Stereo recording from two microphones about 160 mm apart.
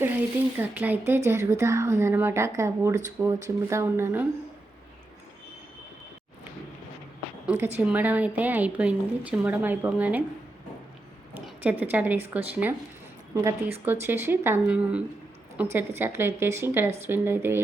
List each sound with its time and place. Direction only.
0.6 s a woman's voice: 10° right (ahead or behind)
7.4 s a woman's voice: 10° right (ahead or behind)
11.4 s a woman's voice: 10° right (ahead or behind)
13.8 s a woman's voice: 15° right (ahead or behind)